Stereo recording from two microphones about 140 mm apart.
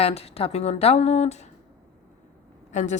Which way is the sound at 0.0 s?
45° left (ahead or behind).